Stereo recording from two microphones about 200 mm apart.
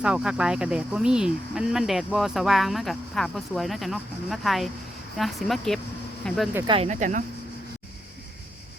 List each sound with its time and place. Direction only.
0.0 s speech: 5° right (ahead or behind)
6.7 s speech: 30° right (ahead or behind)